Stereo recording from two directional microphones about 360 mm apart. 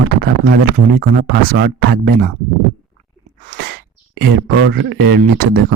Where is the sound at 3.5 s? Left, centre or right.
Right.